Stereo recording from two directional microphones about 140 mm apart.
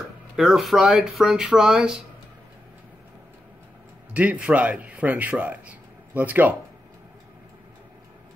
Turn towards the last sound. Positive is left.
turn(degrees=-10)  # may be behind; listen again after turning